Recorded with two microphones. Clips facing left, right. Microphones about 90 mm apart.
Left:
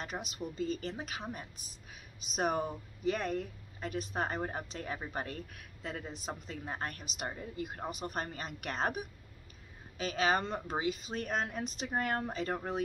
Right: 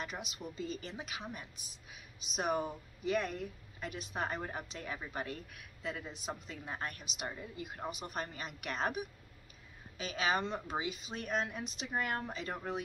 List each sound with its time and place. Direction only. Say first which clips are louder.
0.0 s a woman's voice: left 3 dB; 40° left (ahead or behind)